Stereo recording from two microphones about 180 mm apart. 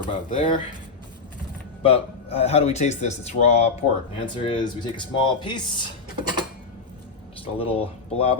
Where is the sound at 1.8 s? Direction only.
35° left (ahead or behind).